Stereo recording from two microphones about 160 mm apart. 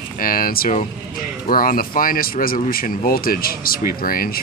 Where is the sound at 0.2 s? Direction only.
65° left (ahead or behind).